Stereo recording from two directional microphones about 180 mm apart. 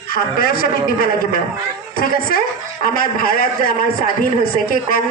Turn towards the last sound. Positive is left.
turn(degrees=55)  # may be behind; listen again after turning